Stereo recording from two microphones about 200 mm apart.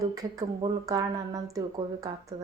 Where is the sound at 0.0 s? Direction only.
15° right (ahead or behind).